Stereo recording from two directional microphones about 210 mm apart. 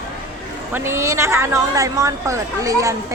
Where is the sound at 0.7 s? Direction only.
10° right (ahead or behind).